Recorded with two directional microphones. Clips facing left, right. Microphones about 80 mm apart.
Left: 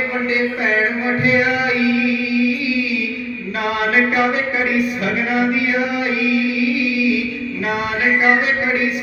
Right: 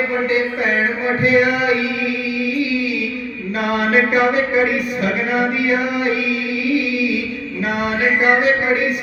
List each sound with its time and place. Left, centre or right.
1.2 s music: right
3.8 s music: right
6.1 s music: right
8.2 s music: right